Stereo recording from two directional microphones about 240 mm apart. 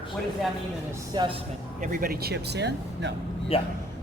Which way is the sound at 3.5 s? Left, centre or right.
Left.